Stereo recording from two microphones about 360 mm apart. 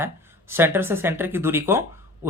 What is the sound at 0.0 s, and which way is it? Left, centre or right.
Speech, centre.